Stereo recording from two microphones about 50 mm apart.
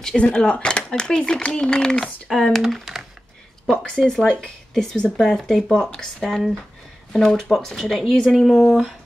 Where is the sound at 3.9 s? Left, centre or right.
Centre.